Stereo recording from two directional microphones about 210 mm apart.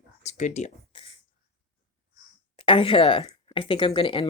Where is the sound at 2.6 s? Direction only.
25° left (ahead or behind).